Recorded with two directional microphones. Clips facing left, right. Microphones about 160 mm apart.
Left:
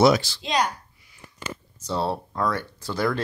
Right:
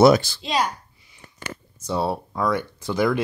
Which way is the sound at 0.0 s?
50° right (ahead or behind).